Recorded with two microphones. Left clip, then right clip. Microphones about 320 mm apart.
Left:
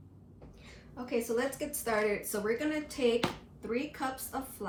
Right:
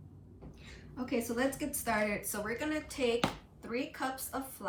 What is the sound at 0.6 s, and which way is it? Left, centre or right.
A woman's voice, centre.